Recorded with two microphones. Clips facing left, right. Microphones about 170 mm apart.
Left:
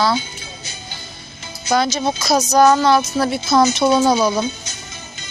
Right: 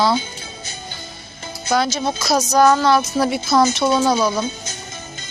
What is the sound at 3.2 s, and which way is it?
Speech, 10° right (ahead or behind).